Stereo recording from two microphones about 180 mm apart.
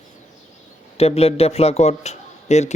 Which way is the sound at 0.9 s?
35° left (ahead or behind).